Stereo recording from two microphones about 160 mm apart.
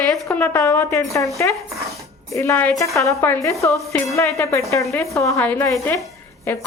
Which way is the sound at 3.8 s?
Centre (ahead or behind).